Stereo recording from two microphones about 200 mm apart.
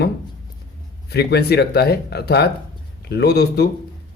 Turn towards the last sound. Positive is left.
turn(degrees=55)  # may be behind; listen again after turning